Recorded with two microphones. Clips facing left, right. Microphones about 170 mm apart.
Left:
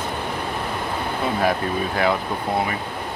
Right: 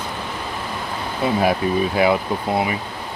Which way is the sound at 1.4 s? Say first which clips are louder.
Right 3 dB; 10° right (ahead or behind).